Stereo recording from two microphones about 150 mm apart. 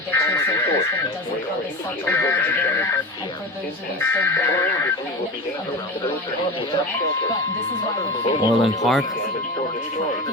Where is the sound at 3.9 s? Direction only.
15° left (ahead or behind).